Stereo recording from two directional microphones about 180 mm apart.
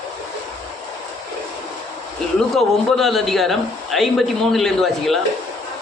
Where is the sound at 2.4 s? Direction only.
Centre (ahead or behind).